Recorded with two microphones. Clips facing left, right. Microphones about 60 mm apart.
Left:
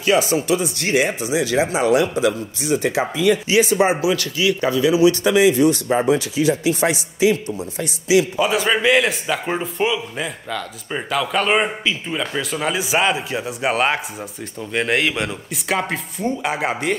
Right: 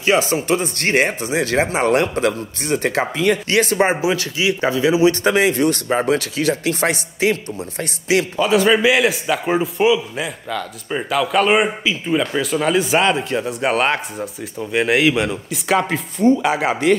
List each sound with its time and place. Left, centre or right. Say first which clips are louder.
0.0 s speech: even; right
4.0 s speech: even; right
5.2 s speech: left 1 dB; right
8.4 s a man's voice: right 4 dB; centre